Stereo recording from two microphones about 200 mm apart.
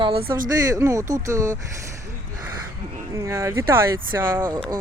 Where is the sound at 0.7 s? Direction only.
15° right (ahead or behind).